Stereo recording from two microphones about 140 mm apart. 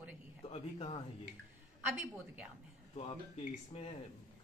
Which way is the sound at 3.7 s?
50° left (ahead or behind).